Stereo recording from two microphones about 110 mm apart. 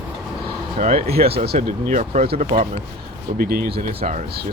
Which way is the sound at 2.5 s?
60° right (ahead or behind).